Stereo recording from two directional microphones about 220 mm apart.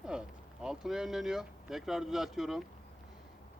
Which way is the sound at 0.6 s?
Centre (ahead or behind).